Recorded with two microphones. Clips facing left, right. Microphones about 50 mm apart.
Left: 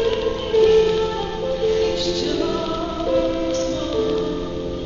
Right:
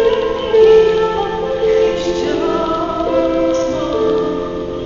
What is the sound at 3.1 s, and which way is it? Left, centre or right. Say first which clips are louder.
Music: right 5 dB; right.